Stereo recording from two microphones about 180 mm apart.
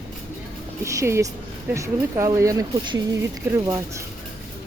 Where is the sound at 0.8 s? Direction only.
15° right (ahead or behind).